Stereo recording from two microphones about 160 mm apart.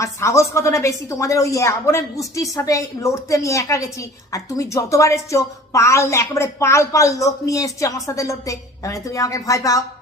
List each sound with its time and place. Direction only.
0.0 s a woman's voice: 15° left (ahead or behind)